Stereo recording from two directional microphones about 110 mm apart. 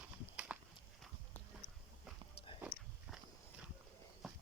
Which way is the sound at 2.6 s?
10° right (ahead or behind).